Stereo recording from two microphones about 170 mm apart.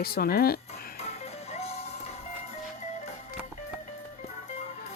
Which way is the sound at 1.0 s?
40° left (ahead or behind).